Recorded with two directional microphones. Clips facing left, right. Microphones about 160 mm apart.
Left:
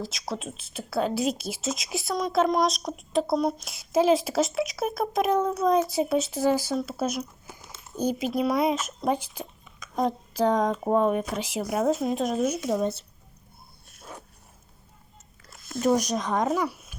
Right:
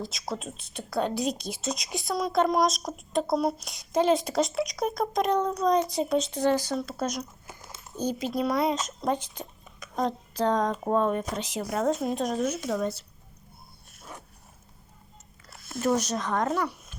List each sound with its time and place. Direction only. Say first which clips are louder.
0.0 s a woman's voice: left 1 dB; centre (ahead or behind)
12.6 s speech: left 3 dB; 20° left (ahead or behind)
15.8 s speech: left 3 dB; 15° left (ahead or behind)
16.5 s a woman's voice: left 2 dB; 5° left (ahead or behind)